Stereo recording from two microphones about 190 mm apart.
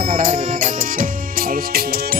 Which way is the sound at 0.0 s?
45° right (ahead or behind).